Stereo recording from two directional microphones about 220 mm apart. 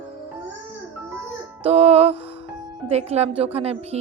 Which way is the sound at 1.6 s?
25° right (ahead or behind).